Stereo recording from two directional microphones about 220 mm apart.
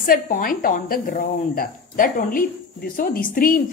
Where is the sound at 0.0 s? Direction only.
40° left (ahead or behind).